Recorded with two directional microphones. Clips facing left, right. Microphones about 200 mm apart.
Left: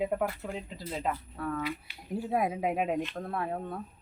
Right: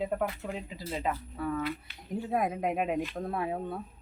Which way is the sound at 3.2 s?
15° right (ahead or behind).